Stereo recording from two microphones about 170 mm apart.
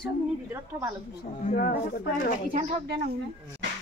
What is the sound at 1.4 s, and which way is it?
Speech, 55° left (ahead or behind).